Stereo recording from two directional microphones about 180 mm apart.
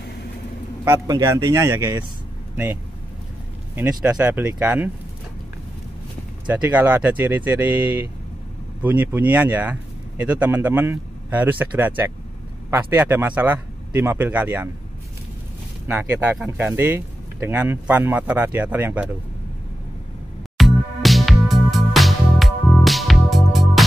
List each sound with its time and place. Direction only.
0.8 s speech: 20° right (ahead or behind)
4.0 s speech: 5° right (ahead or behind)
6.4 s speech: 10° right (ahead or behind)
15.9 s speech: 10° right (ahead or behind)
20.5 s music: centre (ahead or behind)